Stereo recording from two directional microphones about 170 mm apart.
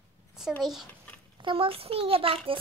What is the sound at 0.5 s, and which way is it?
Speech, centre (ahead or behind).